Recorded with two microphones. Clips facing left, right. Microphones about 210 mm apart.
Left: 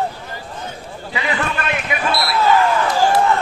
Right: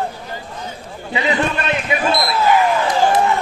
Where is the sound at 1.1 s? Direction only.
20° right (ahead or behind).